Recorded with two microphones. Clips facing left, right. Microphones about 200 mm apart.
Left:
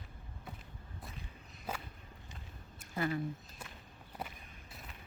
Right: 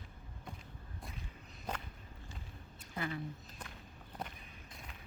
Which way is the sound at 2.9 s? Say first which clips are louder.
Left 5 dB; 45° left (ahead or behind).